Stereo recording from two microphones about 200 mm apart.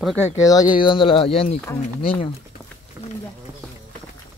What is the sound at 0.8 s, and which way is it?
Speech, 25° left (ahead or behind).